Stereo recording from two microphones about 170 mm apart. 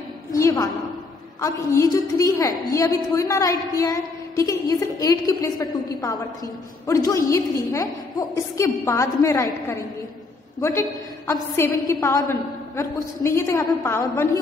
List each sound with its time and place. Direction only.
0.3 s a woman's voice: 20° left (ahead or behind)